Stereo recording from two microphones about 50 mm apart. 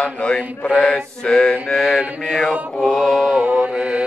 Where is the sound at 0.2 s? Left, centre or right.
Left.